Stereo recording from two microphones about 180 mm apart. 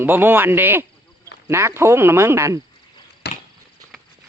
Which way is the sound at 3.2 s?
70° left (ahead or behind).